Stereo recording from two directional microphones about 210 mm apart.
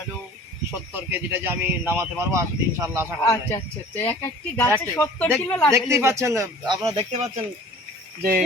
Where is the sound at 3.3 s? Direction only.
10° left (ahead or behind).